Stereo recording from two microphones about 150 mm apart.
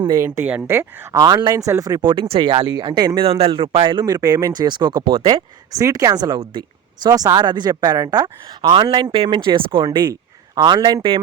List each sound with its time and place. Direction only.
0.2 s speech: 10° right (ahead or behind)
1.2 s speech: 30° right (ahead or behind)
3.2 s speech: 40° right (ahead or behind)